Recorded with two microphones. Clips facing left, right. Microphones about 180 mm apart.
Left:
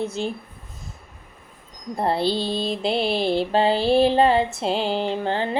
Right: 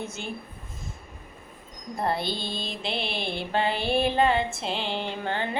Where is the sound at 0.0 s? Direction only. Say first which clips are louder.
Left 9 dB; 35° left (ahead or behind).